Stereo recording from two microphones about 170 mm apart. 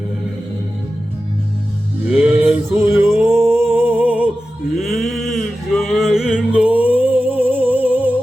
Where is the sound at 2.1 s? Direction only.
10° right (ahead or behind).